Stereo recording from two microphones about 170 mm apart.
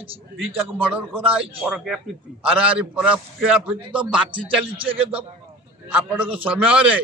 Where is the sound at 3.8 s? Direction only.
30° right (ahead or behind).